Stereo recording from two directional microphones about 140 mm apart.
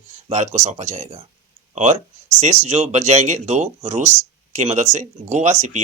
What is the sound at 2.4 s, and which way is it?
Speech, 55° right (ahead or behind).